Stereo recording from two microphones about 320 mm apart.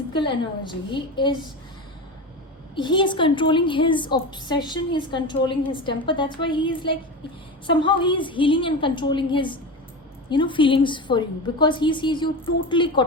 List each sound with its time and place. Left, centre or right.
0.1 s a woman's voice: centre
2.7 s a woman's voice: centre